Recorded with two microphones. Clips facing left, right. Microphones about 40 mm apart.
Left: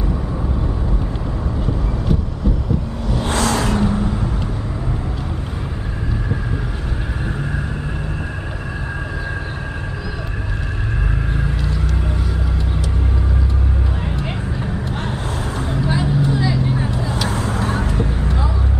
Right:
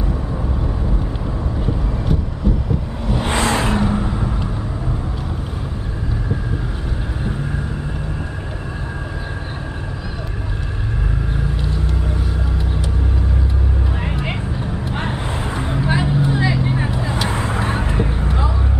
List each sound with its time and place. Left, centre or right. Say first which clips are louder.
2.1 s a sound: left 1 dB; centre
3.1 s vehicle: right 1 dB; right
3.8 s vehicle: left 1 dB; centre
14.0 s vehicle: right 1 dB; right